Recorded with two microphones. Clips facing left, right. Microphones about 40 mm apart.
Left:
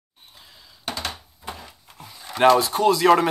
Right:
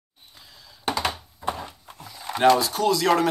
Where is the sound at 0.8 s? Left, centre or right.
Centre.